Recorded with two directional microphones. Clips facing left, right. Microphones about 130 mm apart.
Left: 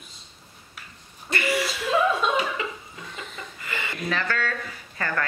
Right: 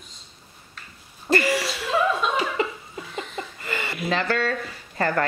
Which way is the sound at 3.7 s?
35° right (ahead or behind).